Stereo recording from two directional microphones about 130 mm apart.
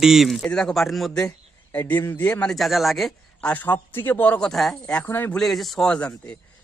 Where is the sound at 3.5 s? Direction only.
15° left (ahead or behind).